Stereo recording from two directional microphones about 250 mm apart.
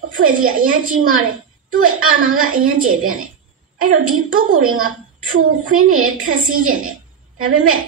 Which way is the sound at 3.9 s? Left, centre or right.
Right.